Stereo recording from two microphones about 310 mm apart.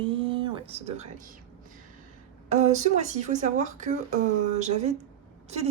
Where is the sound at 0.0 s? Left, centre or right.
Centre.